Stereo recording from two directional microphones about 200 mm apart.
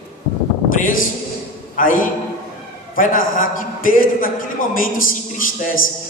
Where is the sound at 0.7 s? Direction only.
40° left (ahead or behind).